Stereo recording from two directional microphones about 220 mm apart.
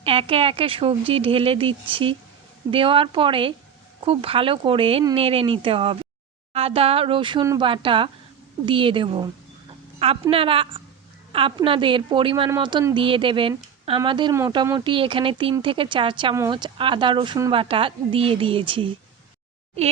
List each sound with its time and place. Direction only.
0.0 s speech: 25° right (ahead or behind)